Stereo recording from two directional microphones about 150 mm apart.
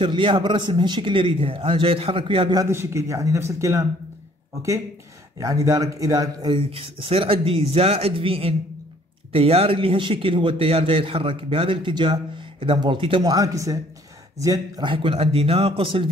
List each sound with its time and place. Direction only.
0.0 s a man's voice: 30° right (ahead or behind)
2.6 s a man's voice: 15° right (ahead or behind); by 13.2 s 35° right (ahead or behind)
13.2 s a man's voice: 25° right (ahead or behind)